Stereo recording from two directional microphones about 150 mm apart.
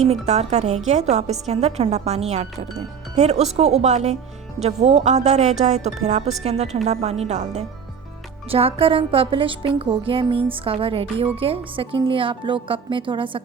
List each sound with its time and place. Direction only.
0.0 s a woman's voice: 45° right (ahead or behind)